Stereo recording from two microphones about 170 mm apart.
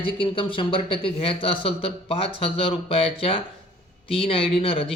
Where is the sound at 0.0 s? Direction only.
30° left (ahead or behind).